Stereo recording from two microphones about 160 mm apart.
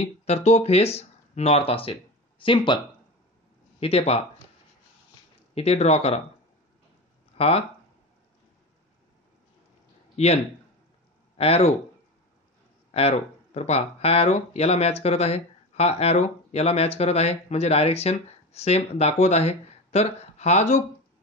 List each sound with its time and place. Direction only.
0.0 s speech: 40° left (ahead or behind)
3.8 s speech: 40° left (ahead or behind)
5.5 s speech: 40° left (ahead or behind)
7.3 s speech: 40° left (ahead or behind)
10.1 s speech: 40° left (ahead or behind)
12.9 s speech: 40° left (ahead or behind)